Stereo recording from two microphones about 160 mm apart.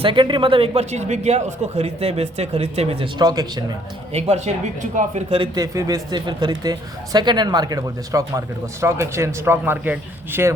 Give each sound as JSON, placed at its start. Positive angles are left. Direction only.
{"t": 0.0, "sound": "a man's voice", "side_deg": -30}
{"t": 3.2, "sound": "speech", "side_deg": -25}
{"t": 4.1, "sound": "speech", "side_deg": -40}
{"t": 5.5, "sound": "speech", "side_deg": -20}